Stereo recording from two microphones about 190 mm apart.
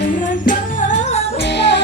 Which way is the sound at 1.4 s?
65° left (ahead or behind).